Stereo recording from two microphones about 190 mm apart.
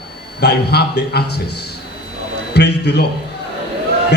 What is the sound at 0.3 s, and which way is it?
Speech, 60° left (ahead or behind).